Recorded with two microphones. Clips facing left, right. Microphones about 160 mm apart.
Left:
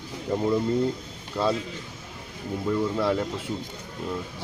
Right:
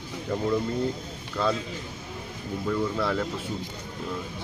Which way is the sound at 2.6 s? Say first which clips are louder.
Left 2 dB; 15° left (ahead or behind).